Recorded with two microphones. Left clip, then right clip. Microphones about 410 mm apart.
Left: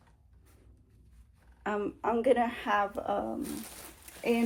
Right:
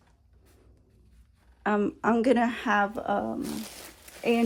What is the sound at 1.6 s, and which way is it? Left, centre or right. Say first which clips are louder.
Speech: right 6 dB; right.